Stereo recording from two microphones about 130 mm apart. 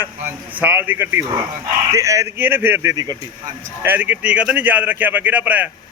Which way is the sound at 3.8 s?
15° right (ahead or behind).